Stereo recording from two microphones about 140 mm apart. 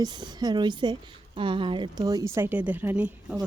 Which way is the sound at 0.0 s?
30° right (ahead or behind).